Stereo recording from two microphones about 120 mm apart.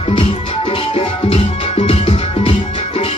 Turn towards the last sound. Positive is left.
turn(degrees=50)  # may be behind; listen again after turning